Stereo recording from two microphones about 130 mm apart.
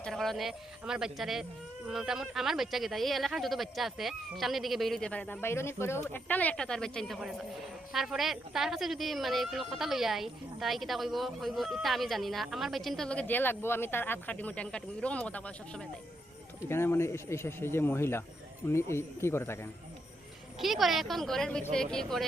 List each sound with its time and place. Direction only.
0.0 s a woman's voice: centre (ahead or behind); by 19.5 s 20° left (ahead or behind)
20.6 s a woman's voice: centre (ahead or behind)